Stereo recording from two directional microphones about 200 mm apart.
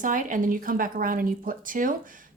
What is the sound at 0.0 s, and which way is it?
Speech, 40° right (ahead or behind).